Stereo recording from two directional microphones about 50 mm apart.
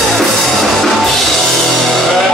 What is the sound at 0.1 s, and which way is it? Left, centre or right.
Music, centre.